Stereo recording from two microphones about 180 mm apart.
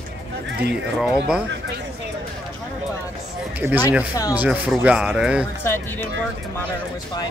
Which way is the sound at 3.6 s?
10° right (ahead or behind).